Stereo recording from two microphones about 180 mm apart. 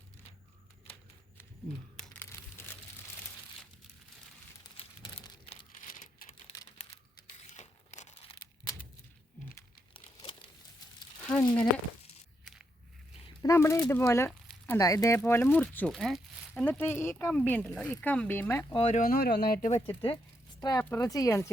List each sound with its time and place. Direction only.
2.0 s crumpling: 10° left (ahead or behind)
4.8 s crumpling: 25° left (ahead or behind)
5.7 s typing: 45° left (ahead or behind)
6.6 s typing: 20° left (ahead or behind)
7.3 s crumpling: 40° left (ahead or behind)
9.9 s crumpling: 30° left (ahead or behind)
11.2 s a sound: 5° left (ahead or behind)
13.4 s speech: 15° left (ahead or behind); by 16.6 s centre (ahead or behind)
16.6 s speech: 10° left (ahead or behind)
18.7 s speech: 35° left (ahead or behind); by 19.5 s 60° left (ahead or behind)
19.6 s speech: 40° left (ahead or behind)
19.9 s speech: 30° left (ahead or behind)
20.6 s speech: 15° left (ahead or behind)